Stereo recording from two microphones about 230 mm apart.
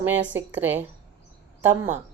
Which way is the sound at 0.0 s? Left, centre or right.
Centre.